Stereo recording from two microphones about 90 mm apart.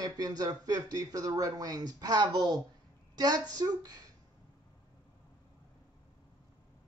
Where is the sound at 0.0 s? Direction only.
45° right (ahead or behind).